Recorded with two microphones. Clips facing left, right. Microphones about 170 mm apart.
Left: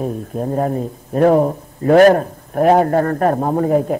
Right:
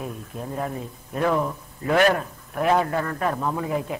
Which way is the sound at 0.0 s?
40° left (ahead or behind).